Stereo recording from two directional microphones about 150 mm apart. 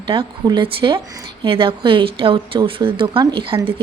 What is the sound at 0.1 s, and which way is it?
Speech, 30° right (ahead or behind).